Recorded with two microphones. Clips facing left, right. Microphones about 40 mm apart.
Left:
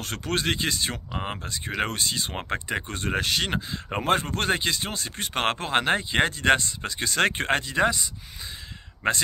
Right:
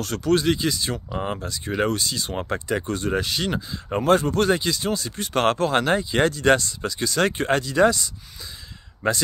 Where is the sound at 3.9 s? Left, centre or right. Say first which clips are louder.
Right 5 dB; left.